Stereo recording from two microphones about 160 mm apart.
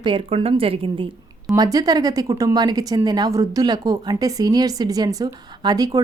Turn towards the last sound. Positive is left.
turn(degrees=-25)  # may be behind; listen again after turning